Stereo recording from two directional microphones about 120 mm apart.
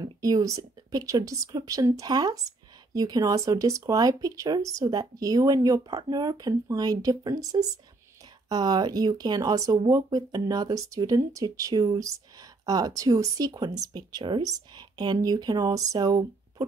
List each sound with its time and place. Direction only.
0.0 s speech: 30° right (ahead or behind)